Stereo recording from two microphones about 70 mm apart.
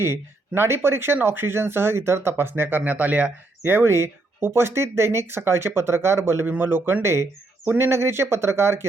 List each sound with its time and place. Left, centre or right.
0.0 s speech: right